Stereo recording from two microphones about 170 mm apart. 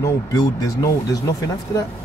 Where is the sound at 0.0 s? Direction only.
20° left (ahead or behind).